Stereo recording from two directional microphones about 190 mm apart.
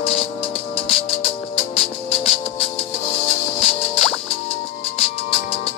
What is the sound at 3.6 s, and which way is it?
Music, 30° left (ahead or behind).